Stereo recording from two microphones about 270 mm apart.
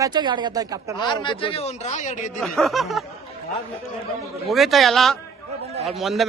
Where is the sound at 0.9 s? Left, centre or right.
Centre.